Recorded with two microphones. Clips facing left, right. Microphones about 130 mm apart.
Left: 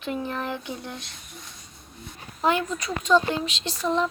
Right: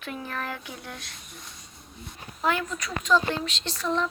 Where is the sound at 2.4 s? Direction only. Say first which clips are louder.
Left 3 dB; 25° left (ahead or behind).